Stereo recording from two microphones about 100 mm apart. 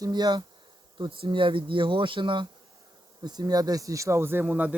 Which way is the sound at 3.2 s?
40° right (ahead or behind).